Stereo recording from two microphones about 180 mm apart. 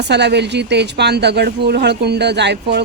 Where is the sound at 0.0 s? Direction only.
70° right (ahead or behind).